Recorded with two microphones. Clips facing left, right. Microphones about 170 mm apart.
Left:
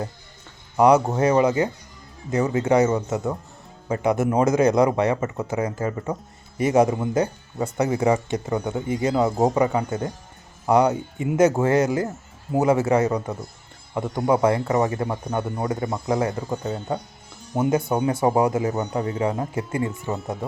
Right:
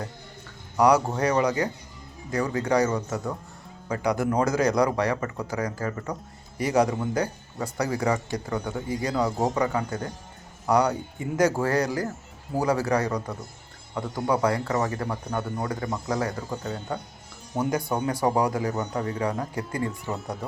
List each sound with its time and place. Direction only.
0.8 s speech: 25° left (ahead or behind)
17.6 s speech: 25° left (ahead or behind)